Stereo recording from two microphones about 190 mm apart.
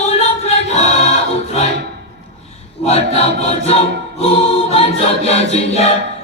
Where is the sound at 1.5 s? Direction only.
35° left (ahead or behind).